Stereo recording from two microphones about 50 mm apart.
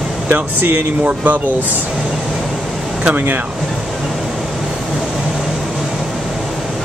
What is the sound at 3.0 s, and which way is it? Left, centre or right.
Speech, right.